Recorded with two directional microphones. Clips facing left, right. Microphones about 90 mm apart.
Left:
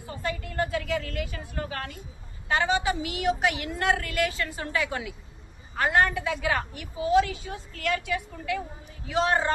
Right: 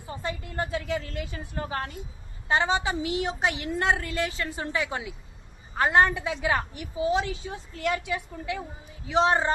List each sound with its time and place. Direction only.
0.1 s a woman's voice: 25° right (ahead or behind)